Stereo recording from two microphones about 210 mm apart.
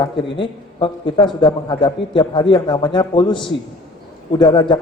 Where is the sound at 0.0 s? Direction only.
25° left (ahead or behind).